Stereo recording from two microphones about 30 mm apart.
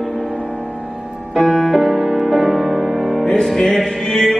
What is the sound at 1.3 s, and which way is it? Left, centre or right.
Music, centre.